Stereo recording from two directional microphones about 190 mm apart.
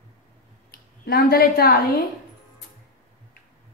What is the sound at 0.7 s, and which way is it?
A woman's voice, 55° left (ahead or behind).